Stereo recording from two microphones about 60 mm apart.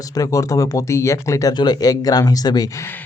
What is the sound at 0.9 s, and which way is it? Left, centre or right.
Speech, left.